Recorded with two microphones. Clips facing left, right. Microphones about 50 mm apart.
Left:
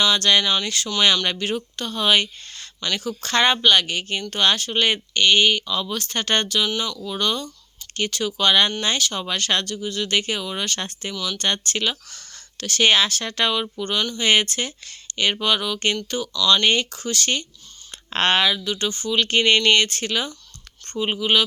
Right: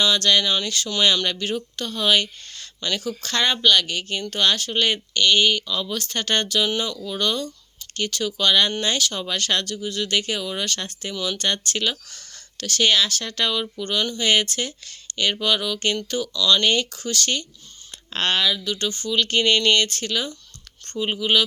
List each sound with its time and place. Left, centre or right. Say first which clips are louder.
0.1 s speech: left 1 dB; centre
0.4 s speech: left 1 dB; centre
1.2 s speech: left 1 dB; centre
6.7 s speech: right 1 dB; centre
7.0 s speech: even; centre
11.1 s speech: right 3 dB; centre
11.3 s speech: left 1 dB; centre
13.8 s speech: even; centre
16.6 s speech: left 1 dB; left
18.1 s speech: left 3 dB; left
18.6 s speech: left 1 dB; centre
20.8 s speech: left 1 dB; centre